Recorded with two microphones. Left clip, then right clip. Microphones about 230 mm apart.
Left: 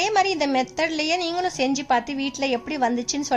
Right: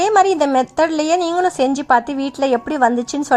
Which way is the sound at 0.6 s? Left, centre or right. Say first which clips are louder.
Right 7 dB; right.